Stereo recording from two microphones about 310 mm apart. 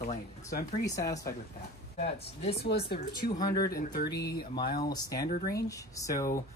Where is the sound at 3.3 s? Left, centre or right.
Centre.